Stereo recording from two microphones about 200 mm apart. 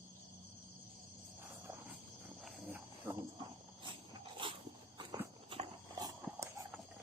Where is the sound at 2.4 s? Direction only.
5° right (ahead or behind).